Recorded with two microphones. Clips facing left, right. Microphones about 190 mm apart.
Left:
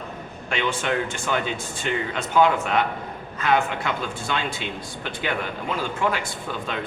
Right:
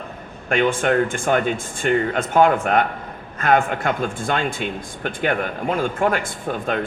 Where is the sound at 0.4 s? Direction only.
50° right (ahead or behind).